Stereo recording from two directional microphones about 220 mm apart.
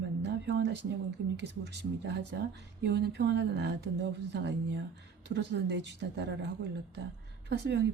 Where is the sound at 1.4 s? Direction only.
50° right (ahead or behind).